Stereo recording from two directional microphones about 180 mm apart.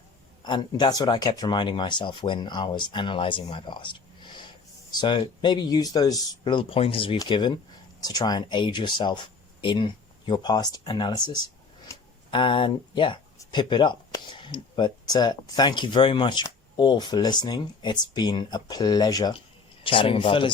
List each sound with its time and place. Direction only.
0.4 s speech: 25° left (ahead or behind)
11.9 s tick-tock: 15° left (ahead or behind)
12.3 s speech: 30° left (ahead or behind)